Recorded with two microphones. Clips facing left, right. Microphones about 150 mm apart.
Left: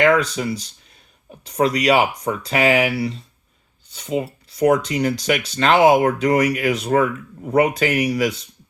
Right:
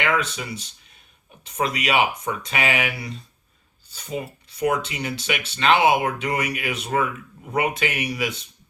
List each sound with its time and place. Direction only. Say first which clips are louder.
0.0 s speech: left 8 dB; 35° left (ahead or behind)
4.4 s speech: left 6 dB; 35° left (ahead or behind)